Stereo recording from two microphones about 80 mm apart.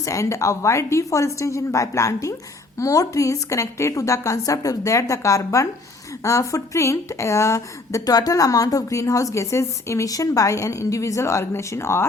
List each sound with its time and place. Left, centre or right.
0.0 s a woman's voice: left